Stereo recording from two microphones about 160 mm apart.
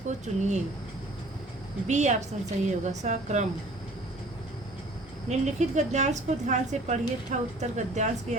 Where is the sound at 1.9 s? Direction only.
45° right (ahead or behind).